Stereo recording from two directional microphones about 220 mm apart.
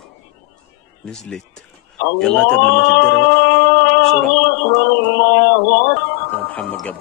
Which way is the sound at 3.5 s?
50° left (ahead or behind).